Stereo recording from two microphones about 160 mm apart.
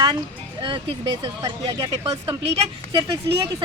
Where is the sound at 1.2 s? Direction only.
20° right (ahead or behind).